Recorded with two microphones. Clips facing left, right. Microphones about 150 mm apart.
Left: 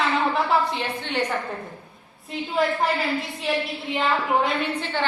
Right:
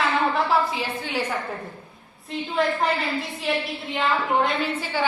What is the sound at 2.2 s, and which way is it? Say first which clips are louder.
A woman's voice: even; centre (ahead or behind).